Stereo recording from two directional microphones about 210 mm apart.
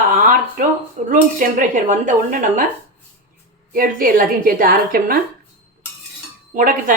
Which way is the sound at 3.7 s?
40° right (ahead or behind).